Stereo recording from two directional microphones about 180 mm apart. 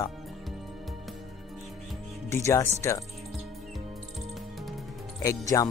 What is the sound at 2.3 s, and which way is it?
Speech, 15° left (ahead or behind).